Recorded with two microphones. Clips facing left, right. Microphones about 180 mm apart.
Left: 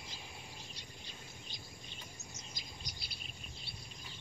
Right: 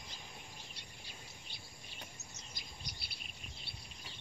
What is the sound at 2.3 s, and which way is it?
Bird, 60° right (ahead or behind).